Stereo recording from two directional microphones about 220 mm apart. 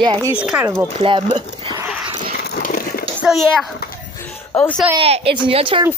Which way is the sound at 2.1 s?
40° left (ahead or behind).